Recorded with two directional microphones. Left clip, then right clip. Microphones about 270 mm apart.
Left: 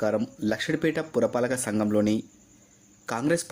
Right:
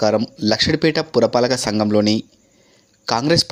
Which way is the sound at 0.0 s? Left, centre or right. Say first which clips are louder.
Right 9 dB; right.